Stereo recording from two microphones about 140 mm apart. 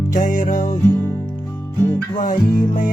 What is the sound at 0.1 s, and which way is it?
Music, 70° left (ahead or behind).